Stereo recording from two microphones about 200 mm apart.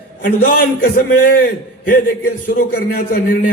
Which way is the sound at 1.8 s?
50° left (ahead or behind).